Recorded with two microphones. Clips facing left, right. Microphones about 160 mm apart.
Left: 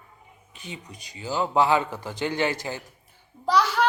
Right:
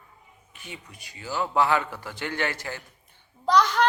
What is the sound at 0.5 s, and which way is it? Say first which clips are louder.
A man's voice: left 3 dB; 20° left (ahead or behind).